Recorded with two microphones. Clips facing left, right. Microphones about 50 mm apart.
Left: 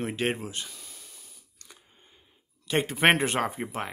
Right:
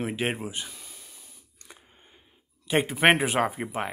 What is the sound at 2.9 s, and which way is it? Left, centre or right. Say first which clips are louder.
Speech: right 1 dB; centre.